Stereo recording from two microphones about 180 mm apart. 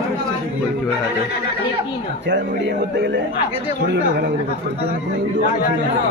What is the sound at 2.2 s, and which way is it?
Speech, 75° right (ahead or behind).